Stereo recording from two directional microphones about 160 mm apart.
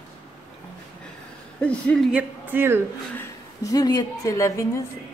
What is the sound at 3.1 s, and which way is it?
A woman's voice, 20° left (ahead or behind).